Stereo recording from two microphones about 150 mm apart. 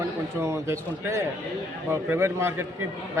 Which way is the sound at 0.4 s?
20° right (ahead or behind).